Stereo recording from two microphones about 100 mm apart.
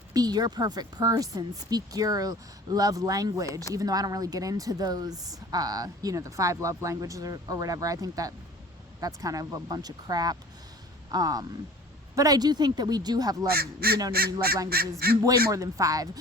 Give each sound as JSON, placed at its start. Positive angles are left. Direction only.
{"t": 0.1, "sound": "speech", "side_deg": -40}